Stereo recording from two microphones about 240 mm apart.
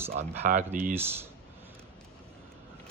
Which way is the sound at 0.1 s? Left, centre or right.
Right.